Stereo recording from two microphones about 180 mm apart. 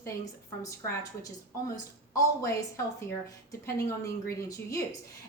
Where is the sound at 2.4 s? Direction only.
15° left (ahead or behind).